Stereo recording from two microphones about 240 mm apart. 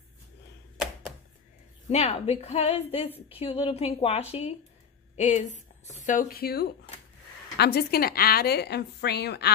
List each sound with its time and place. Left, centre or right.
1.9 s a woman's voice: left